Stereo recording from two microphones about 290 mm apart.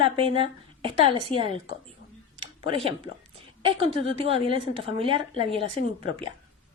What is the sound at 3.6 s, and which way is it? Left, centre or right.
Speech, centre.